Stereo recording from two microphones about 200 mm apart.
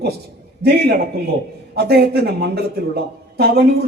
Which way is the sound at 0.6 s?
55° right (ahead or behind).